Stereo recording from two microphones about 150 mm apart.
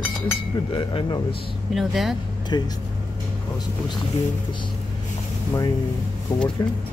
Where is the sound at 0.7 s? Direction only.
35° left (ahead or behind).